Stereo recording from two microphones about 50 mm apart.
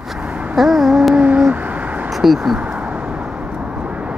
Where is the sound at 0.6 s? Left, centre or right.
Centre.